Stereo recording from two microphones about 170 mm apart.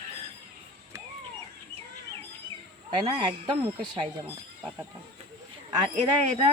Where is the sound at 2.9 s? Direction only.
25° right (ahead or behind).